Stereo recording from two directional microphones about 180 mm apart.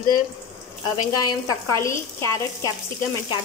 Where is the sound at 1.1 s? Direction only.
20° left (ahead or behind).